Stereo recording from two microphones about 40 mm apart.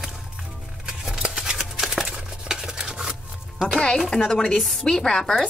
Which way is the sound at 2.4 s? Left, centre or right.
Centre.